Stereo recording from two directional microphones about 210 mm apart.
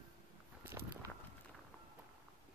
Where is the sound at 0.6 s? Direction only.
10° right (ahead or behind).